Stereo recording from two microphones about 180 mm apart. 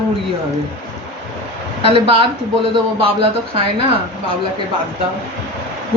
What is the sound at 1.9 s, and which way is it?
Speech, 30° right (ahead or behind).